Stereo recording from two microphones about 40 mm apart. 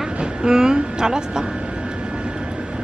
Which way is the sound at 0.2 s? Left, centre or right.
Centre.